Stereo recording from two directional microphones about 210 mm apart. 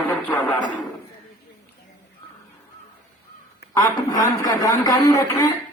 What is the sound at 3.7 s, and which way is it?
A man's voice, 15° left (ahead or behind).